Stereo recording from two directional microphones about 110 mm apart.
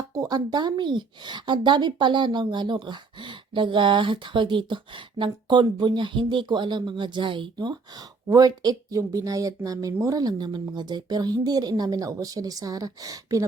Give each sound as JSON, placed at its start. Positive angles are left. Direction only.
{"t": 0.0, "sound": "speech", "side_deg": -35}